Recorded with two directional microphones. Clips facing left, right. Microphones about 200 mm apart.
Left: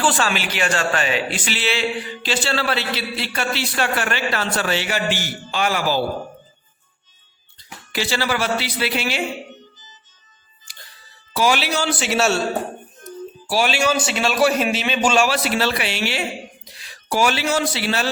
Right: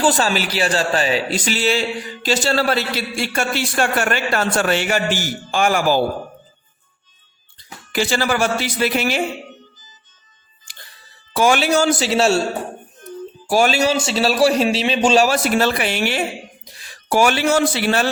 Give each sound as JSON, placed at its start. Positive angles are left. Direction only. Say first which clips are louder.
{"t": 0.0, "sound": "a man's voice", "louder": "right 3 dB", "side_deg": -40}
{"t": 7.9, "sound": "a man's voice", "louder": "right 4 dB", "side_deg": -50}
{"t": 11.3, "sound": "a man's voice", "louder": "right 4 dB", "side_deg": -50}
{"t": 12.0, "sound": "a man's voice", "louder": "right 3 dB", "side_deg": -30}
{"t": 13.1, "sound": "music", "louder": "right 4 dB", "side_deg": -45}
{"t": 13.9, "sound": "a man's voice", "louder": "right 3 dB", "side_deg": -25}
{"t": 15.3, "sound": "a man's voice", "louder": "right 3 dB", "side_deg": -45}